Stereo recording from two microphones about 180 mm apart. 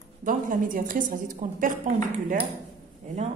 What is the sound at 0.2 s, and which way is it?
A woman's voice, 50° right (ahead or behind).